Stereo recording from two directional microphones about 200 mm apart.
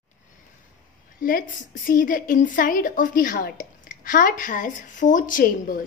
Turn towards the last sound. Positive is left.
turn(degrees=45)  # may be behind; listen again after turning